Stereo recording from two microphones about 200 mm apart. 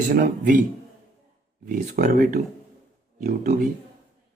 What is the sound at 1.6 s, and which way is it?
A man's voice, 45° right (ahead or behind).